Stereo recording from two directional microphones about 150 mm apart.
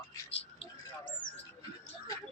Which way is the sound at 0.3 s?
40° left (ahead or behind).